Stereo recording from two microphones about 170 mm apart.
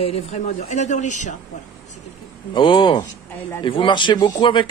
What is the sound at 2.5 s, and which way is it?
Speech, 30° left (ahead or behind).